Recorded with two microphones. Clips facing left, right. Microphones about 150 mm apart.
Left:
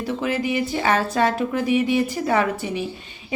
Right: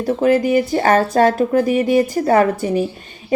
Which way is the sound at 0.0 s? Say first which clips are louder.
Right 9 dB; 45° right (ahead or behind).